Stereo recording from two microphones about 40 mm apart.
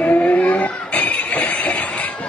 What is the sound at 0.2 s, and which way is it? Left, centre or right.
Vehicle, left.